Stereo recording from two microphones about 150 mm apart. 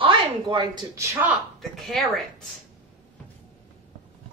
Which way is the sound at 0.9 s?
10° right (ahead or behind).